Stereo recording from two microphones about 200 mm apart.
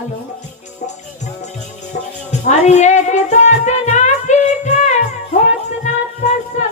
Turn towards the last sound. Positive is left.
turn(degrees=35)  # may be behind; listen again after turning